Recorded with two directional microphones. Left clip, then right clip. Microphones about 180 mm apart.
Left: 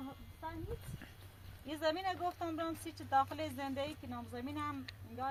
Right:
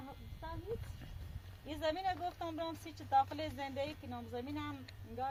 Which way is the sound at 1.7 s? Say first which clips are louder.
Left 1 dB; 50° right (ahead or behind).